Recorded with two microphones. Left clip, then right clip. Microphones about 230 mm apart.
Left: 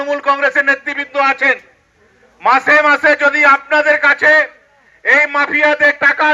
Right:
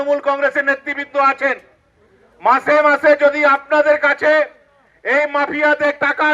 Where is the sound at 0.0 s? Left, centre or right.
Right.